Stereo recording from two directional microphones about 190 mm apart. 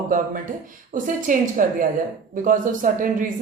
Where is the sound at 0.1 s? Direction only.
45° right (ahead or behind).